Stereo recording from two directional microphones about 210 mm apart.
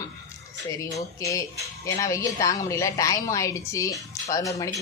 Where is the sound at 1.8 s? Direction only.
15° left (ahead or behind).